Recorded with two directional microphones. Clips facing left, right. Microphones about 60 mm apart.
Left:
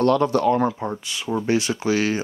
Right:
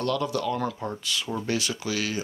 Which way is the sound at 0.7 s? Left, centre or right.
Left.